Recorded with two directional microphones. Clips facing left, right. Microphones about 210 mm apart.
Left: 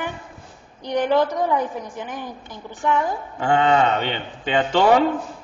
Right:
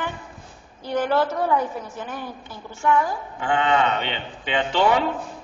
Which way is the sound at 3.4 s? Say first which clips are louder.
Left 3 dB; 40° left (ahead or behind).